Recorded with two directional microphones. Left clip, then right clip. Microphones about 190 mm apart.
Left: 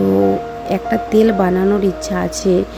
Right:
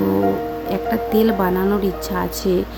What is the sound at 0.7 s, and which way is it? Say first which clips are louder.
Speech: left 5 dB; 25° left (ahead or behind).